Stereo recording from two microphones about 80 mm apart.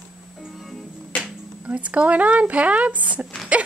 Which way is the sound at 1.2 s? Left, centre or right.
Centre.